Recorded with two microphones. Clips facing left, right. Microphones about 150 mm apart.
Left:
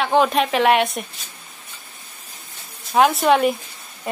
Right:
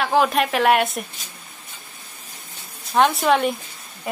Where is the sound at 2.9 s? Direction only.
5° left (ahead or behind).